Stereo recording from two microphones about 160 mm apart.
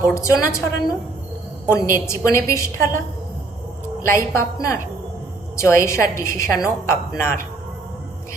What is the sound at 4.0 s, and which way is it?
A woman's voice, 15° left (ahead or behind).